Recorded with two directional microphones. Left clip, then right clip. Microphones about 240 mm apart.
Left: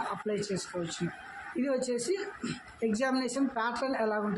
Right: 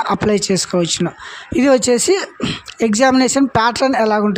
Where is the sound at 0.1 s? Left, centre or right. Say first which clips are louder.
Right 17 dB; right.